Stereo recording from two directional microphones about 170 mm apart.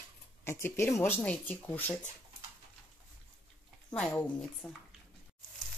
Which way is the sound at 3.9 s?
5° left (ahead or behind).